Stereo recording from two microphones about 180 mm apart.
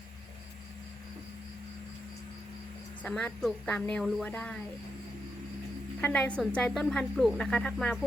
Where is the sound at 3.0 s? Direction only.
5° left (ahead or behind).